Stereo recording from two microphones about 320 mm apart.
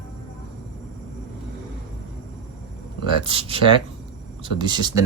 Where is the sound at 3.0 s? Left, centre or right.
Centre.